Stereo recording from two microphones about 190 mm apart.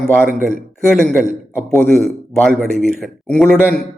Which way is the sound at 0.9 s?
Centre (ahead or behind).